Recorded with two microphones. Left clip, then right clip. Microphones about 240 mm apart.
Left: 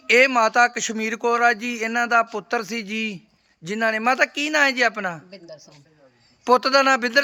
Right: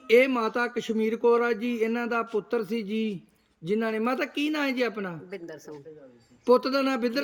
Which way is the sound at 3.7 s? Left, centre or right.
Centre.